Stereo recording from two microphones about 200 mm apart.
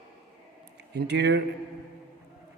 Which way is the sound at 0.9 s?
55° right (ahead or behind).